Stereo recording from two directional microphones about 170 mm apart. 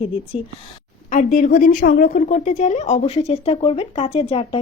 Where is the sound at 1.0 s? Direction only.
50° left (ahead or behind).